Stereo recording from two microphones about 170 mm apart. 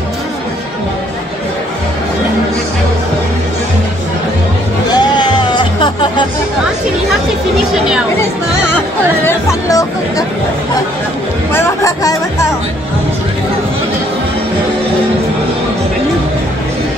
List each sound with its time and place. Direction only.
4.8 s music: 25° left (ahead or behind)
9.2 s chatter: 20° left (ahead or behind)
11.5 s music: 15° left (ahead or behind)